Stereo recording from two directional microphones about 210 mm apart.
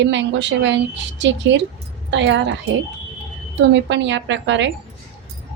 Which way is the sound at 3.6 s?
60° right (ahead or behind).